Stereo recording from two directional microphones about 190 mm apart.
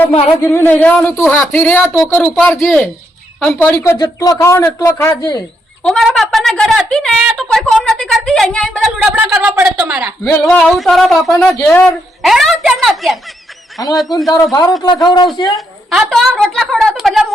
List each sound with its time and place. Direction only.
0.4 s a woman's voice: 10° left (ahead or behind)
3.8 s speech: 20° left (ahead or behind)
5.8 s a woman's voice: centre (ahead or behind)
9.1 s speech: 5° right (ahead or behind)
10.2 s a woman's voice: 10° left (ahead or behind)
13.7 s a man's voice: 20° left (ahead or behind)
15.9 s a woman's voice: centre (ahead or behind)